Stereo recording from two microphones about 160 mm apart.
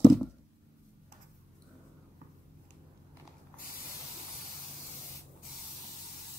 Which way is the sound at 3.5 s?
65° left (ahead or behind).